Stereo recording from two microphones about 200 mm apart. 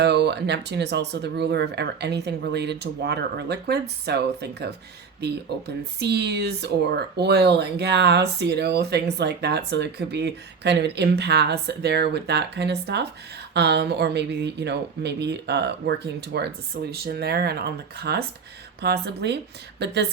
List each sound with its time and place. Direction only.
0.0 s speech: 55° right (ahead or behind)